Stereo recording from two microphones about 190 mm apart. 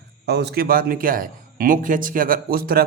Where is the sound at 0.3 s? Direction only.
60° right (ahead or behind).